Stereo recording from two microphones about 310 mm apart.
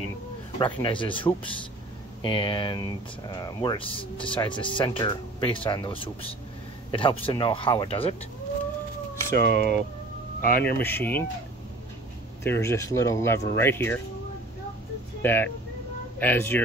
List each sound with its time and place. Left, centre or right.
0.6 s speech: centre
9.3 s speech: left
10.8 s speech: centre
12.4 s speech: centre
15.2 s speech: centre